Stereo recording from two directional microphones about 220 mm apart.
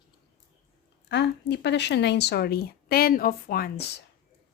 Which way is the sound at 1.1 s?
50° left (ahead or behind).